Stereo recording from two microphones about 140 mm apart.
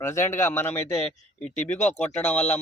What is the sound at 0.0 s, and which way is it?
Speech, 20° left (ahead or behind).